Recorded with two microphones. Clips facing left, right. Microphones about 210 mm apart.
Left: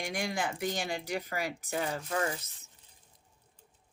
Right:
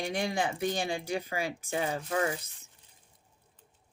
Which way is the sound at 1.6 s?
25° right (ahead or behind).